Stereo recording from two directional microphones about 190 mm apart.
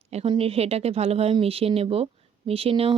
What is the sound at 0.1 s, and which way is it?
Speech, 30° right (ahead or behind).